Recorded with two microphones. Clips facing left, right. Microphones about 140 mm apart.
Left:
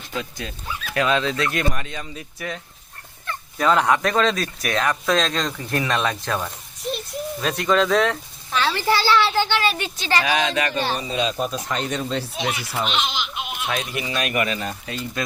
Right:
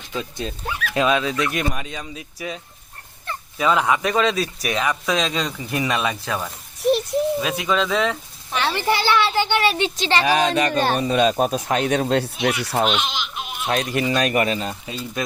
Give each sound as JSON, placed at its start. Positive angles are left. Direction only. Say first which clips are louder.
{"t": 0.2, "sound": "a child's voice", "louder": "right 3 dB", "side_deg": -25}
{"t": 0.7, "sound": "dog", "louder": "right 4 dB", "side_deg": -70}
{"t": 0.9, "sound": "speech", "louder": "right 1 dB", "side_deg": -15}
{"t": 3.6, "sound": "speech", "louder": "left 1 dB", "side_deg": -5}
{"t": 8.5, "sound": "a sound", "louder": "even", "side_deg": -20}
{"t": 8.9, "sound": "a child's voice", "louder": "even", "side_deg": -20}
{"t": 10.3, "sound": "speech", "louder": "right 3 dB", "side_deg": -45}
{"t": 13.3, "sound": "bleat", "louder": "left 1 dB", "side_deg": 5}
{"t": 13.7, "sound": "a man's voice", "louder": "right 7 dB", "side_deg": -40}
{"t": 14.6, "sound": "speech", "louder": "even", "side_deg": -15}